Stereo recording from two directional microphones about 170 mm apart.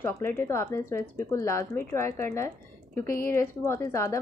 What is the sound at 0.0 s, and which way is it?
Speech, 15° left (ahead or behind).